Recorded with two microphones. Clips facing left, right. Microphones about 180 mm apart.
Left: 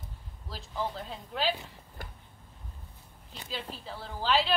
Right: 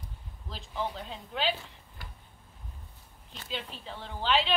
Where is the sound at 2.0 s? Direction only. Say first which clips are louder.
Left 5 dB; 50° left (ahead or behind).